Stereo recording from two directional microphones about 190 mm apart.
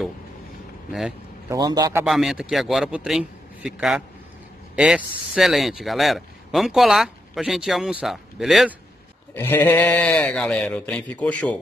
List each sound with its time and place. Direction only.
1.5 s a man's voice: 20° right (ahead or behind)
2.0 s speech: centre (ahead or behind)
9.3 s speech: 10° left (ahead or behind)